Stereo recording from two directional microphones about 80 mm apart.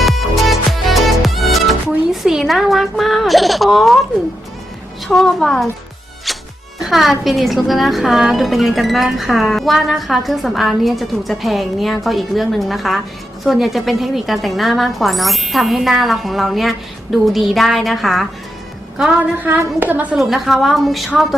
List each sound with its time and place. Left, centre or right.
0.0 s music: centre
2.2 s speech: centre
5.0 s a woman's voice: centre
6.3 s music: centre
6.7 s a woman's voice: centre
19.4 s a woman's voice: right
20.1 s a woman's voice: centre